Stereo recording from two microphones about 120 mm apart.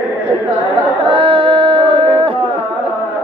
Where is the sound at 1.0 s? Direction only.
45° right (ahead or behind).